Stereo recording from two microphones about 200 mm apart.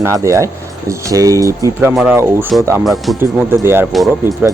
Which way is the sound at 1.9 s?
5° right (ahead or behind).